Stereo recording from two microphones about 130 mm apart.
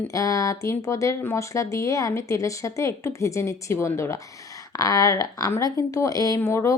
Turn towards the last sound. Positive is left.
turn(degrees=20)  # may be behind; listen again after turning